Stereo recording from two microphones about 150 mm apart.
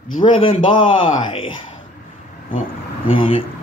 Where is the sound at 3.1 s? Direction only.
40° left (ahead or behind).